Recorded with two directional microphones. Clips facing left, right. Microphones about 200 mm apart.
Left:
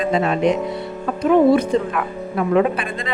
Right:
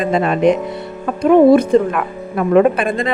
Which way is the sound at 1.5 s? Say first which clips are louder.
Right 6 dB; 50° right (ahead or behind).